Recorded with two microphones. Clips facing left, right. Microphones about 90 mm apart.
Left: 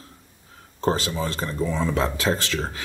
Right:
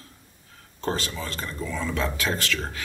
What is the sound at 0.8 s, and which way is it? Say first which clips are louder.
Speech: left 5 dB; 35° left (ahead or behind).